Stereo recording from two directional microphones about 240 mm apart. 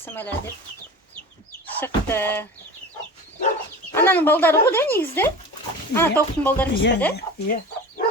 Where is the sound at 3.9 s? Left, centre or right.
Centre.